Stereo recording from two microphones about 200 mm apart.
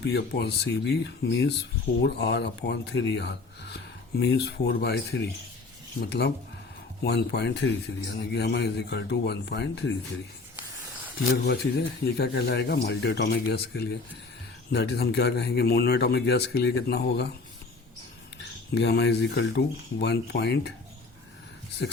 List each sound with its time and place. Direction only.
0.0 s a man's voice: 55° left (ahead or behind)
12.0 s a man's voice: 55° left (ahead or behind)
18.7 s a man's voice: 55° left (ahead or behind)